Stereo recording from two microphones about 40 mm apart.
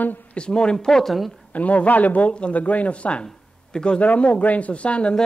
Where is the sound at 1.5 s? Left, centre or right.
Left; by 4.0 s centre.